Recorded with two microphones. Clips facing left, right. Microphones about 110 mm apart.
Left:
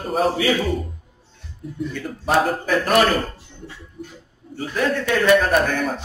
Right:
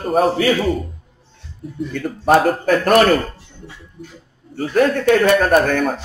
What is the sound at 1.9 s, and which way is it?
A man's voice, 50° right (ahead or behind).